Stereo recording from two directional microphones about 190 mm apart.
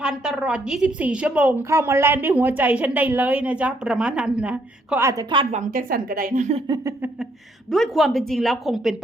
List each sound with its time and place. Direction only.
0.0 s a woman's voice: 5° right (ahead or behind)
5.3 s a woman's voice: 25° right (ahead or behind)
5.5 s a woman's voice: 45° right (ahead or behind)
6.7 s a woman's voice: 20° right (ahead or behind)
7.7 s a woman's voice: centre (ahead or behind)